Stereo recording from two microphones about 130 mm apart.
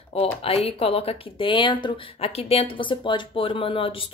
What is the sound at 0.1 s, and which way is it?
Speech, 50° left (ahead or behind).